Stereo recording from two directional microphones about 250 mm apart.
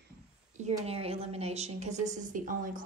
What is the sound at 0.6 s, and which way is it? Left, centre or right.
A woman's voice, right.